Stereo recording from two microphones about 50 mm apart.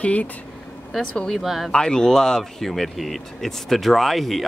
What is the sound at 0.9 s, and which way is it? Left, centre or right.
Speech, centre.